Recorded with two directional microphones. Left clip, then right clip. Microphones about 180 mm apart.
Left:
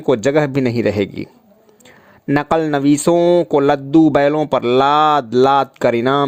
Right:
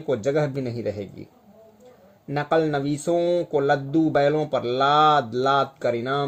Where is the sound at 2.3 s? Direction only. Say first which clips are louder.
Left 6 dB; 55° left (ahead or behind).